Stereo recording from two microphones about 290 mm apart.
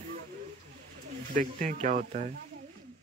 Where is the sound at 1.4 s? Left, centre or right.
Right.